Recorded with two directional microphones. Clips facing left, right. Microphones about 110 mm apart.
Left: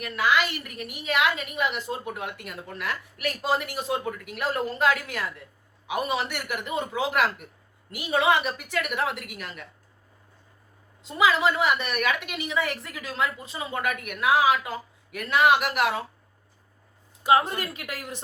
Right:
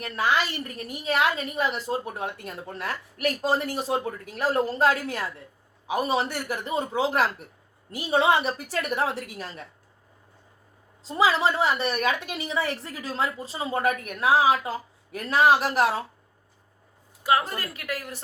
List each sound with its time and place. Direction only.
0.0 s a woman's voice: 35° right (ahead or behind)
11.0 s a woman's voice: 35° right (ahead or behind)
17.2 s a woman's voice: 25° left (ahead or behind)